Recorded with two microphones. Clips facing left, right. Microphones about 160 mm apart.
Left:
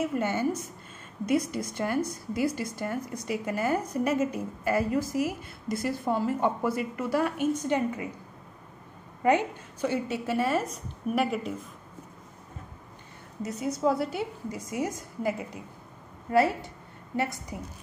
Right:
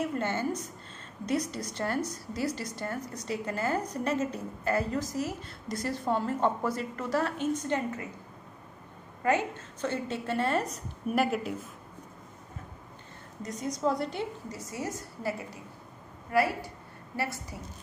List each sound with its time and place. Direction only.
0.0 s a woman's voice: 10° left (ahead or behind)
9.2 s a woman's voice: 20° left (ahead or behind); by 11.5 s centre (ahead or behind)
13.4 s a woman's voice: 5° left (ahead or behind)